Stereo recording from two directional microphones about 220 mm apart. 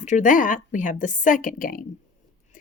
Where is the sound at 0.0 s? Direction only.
35° left (ahead or behind).